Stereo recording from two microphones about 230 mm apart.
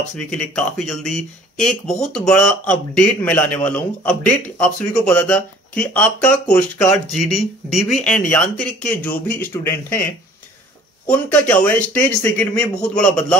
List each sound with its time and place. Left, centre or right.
0.2 s speech: centre
11.1 s speech: centre